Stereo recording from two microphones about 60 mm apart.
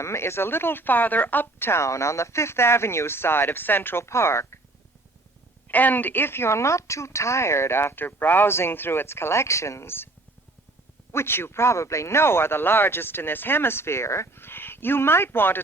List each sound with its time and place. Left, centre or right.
0.0 s speech: left
5.6 s speech: left
11.1 s speech: left